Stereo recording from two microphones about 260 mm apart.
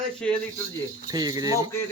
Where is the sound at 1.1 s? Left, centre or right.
Centre.